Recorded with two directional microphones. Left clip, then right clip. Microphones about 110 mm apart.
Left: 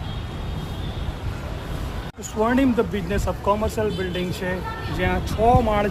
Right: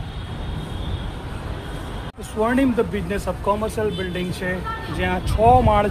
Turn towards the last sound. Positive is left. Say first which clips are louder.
# right 3 dB
turn(degrees=-30)  # may be behind; listen again after turning